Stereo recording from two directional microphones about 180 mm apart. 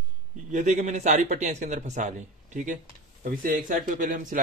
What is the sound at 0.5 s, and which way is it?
A man's voice, 40° right (ahead or behind).